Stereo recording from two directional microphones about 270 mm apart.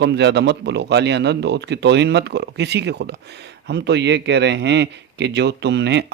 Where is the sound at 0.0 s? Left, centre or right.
Right.